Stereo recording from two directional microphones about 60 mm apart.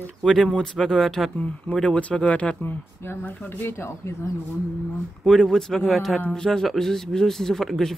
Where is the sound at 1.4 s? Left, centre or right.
Left.